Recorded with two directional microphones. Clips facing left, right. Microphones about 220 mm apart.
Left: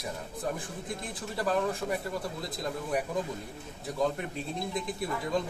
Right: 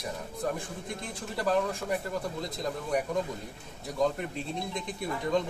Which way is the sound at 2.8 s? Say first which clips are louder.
Right 2 dB; 5° left (ahead or behind).